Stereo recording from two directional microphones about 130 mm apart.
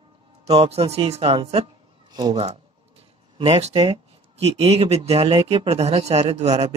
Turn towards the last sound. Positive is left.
turn(degrees=-50)  # may be behind; listen again after turning